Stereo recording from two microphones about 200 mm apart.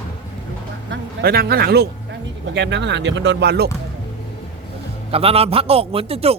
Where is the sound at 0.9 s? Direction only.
50° right (ahead or behind).